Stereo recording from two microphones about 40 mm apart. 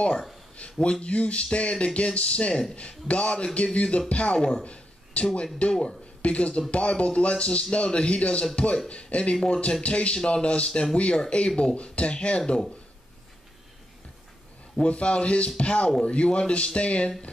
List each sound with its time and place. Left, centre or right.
0.7 s speech: left
14.8 s speech: left